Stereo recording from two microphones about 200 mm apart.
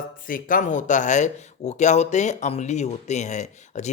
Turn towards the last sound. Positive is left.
turn(degrees=35)  # may be behind; listen again after turning